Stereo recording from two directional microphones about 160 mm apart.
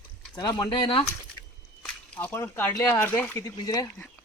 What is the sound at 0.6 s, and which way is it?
Speech, 30° left (ahead or behind).